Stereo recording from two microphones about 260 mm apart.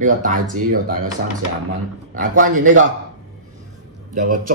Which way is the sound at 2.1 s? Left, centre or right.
Right.